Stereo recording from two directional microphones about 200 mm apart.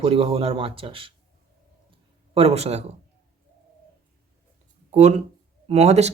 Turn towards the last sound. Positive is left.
turn(degrees=-30)  # may be behind; listen again after turning